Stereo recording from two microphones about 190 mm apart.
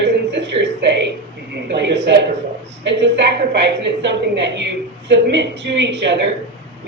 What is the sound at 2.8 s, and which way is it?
Speech, 65° right (ahead or behind).